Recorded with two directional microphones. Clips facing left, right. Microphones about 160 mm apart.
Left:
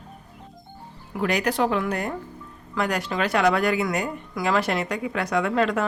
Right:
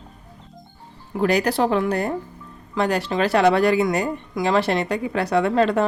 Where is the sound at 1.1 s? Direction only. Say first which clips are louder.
Right 4 dB; 35° right (ahead or behind).